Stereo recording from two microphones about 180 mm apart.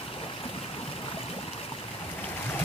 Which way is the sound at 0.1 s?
30° left (ahead or behind).